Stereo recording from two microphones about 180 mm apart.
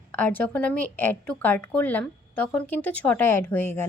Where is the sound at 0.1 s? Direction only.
10° left (ahead or behind).